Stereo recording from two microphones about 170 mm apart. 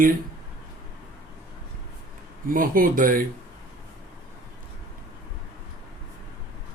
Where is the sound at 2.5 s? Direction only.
55° right (ahead or behind).